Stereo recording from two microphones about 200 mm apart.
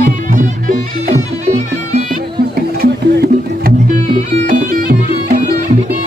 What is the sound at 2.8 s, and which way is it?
Music, 50° right (ahead or behind).